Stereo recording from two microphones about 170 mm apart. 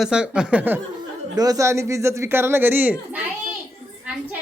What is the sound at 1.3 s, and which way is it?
A man's voice, 20° right (ahead or behind).